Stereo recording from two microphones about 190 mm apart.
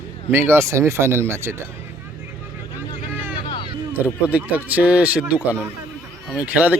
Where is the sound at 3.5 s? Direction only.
25° left (ahead or behind).